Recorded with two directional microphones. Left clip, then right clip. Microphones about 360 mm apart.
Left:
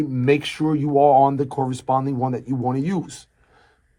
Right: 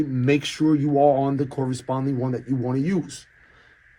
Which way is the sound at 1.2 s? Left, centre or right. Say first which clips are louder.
Left 7 dB; centre.